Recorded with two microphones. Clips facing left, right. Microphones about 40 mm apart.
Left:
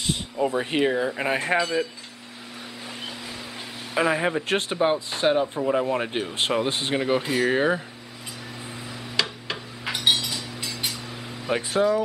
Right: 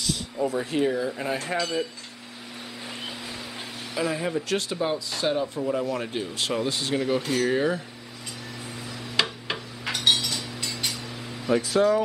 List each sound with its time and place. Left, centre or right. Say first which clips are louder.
0.0 s a sound: left 2 dB; left
0.7 s speech: left 2 dB; left
1.6 s speech: left 3 dB; centre
3.9 s speech: left 4 dB; left
9.1 s tick-tock: right 1 dB; centre
9.8 s a sound: even; centre
11.5 s speech: right 2 dB; left